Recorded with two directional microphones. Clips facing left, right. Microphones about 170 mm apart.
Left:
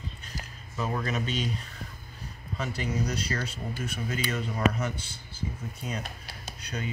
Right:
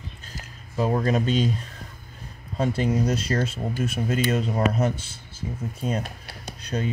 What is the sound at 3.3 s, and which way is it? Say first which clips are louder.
Speech: right 8 dB; 45° right (ahead or behind).